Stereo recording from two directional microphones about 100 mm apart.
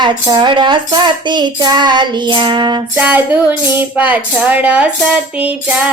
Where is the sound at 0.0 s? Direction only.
50° right (ahead or behind).